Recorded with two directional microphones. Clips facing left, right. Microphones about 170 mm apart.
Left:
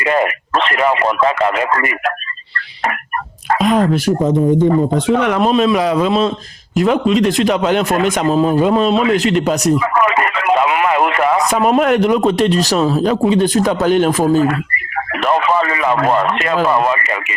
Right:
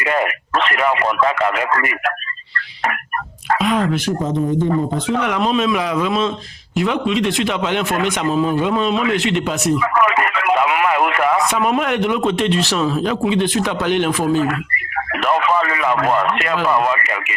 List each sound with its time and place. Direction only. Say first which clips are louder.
0.0 s speech: left 4 dB; 30° left (ahead or behind)
3.6 s speech: left 6 dB; 40° left (ahead or behind)
5.1 s speech: left 4 dB; 45° left (ahead or behind); by 11.3 s 30° left (ahead or behind)
11.3 s speech: left 4 dB; 40° left (ahead or behind)